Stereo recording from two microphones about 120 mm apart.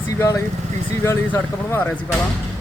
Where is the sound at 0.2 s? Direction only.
25° left (ahead or behind).